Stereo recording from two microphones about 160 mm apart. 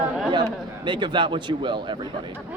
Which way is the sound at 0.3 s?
30° right (ahead or behind).